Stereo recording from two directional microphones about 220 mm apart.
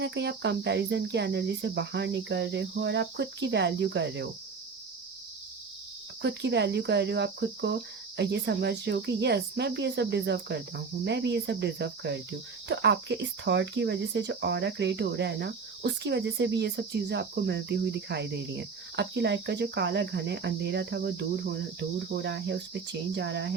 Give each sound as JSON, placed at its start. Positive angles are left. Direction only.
{"t": 0.0, "sound": "cricket", "side_deg": -50}
{"t": 6.2, "sound": "cricket", "side_deg": -50}